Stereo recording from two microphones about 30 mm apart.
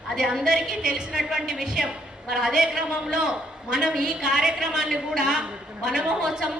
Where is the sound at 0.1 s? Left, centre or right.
Right.